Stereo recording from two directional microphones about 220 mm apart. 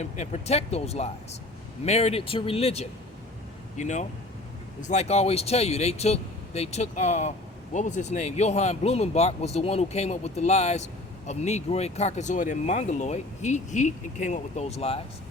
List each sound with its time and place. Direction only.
0.0 s speech: 30° left (ahead or behind)